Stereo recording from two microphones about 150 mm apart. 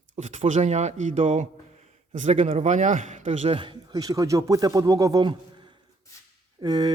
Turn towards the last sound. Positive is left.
turn(degrees=-25)  # may be behind; listen again after turning